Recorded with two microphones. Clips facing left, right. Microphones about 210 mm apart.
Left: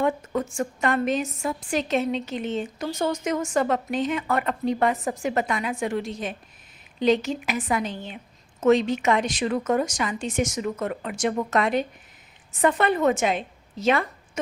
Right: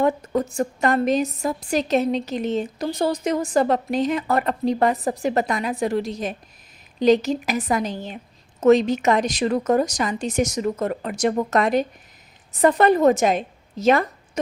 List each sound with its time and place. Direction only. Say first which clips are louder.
0.0 s a woman's voice: right 4 dB; 40° right (ahead or behind)